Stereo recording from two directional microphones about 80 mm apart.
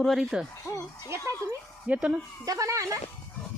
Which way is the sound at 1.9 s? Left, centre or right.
Centre.